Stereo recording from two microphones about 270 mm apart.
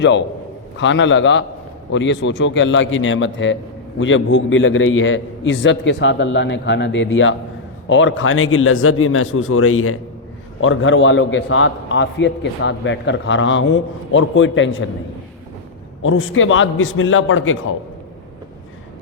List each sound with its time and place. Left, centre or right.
0.8 s a man's voice: left
16.0 s a man's voice: left